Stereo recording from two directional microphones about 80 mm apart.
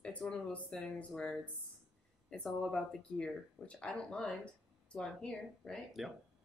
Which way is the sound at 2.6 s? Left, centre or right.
Centre.